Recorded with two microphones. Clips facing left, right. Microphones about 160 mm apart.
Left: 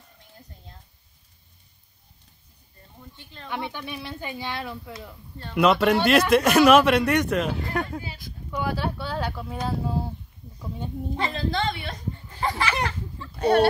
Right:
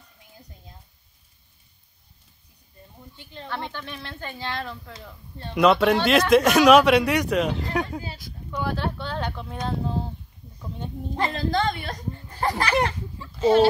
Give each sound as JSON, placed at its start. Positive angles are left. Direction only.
{"t": 3.2, "sound": "speech", "side_deg": -15}
{"t": 3.4, "sound": "speech", "side_deg": 15}
{"t": 11.1, "sound": "a child's voice", "side_deg": -40}
{"t": 13.4, "sound": "speech", "side_deg": 60}